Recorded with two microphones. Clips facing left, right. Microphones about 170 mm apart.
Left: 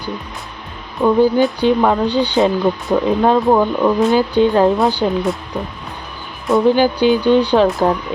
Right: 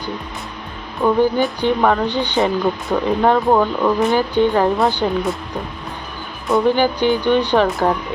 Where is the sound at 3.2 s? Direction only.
15° left (ahead or behind).